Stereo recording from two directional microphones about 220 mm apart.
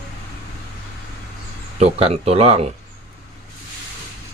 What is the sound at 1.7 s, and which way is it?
Speech, 25° right (ahead or behind).